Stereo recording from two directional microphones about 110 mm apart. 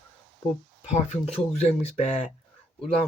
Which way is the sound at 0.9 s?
90° left.